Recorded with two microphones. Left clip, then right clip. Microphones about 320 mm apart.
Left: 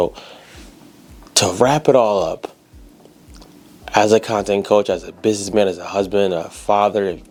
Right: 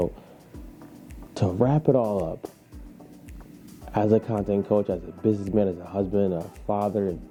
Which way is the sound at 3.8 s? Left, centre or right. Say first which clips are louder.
Left 9 dB; centre.